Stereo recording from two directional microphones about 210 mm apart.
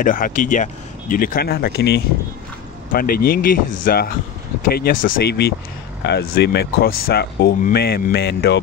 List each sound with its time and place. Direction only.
0.0 s speech: 40° left (ahead or behind)